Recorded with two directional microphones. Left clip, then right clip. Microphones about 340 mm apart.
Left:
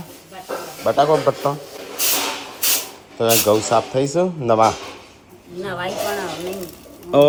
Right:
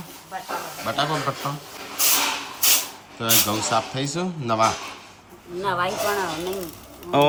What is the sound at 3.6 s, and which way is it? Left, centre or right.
Speech, centre.